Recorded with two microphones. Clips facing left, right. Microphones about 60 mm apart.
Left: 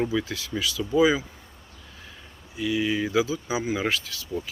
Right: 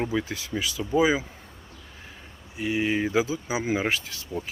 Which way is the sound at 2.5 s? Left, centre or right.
Right.